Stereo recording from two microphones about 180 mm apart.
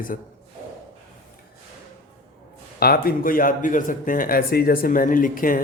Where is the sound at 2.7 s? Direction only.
55° left (ahead or behind).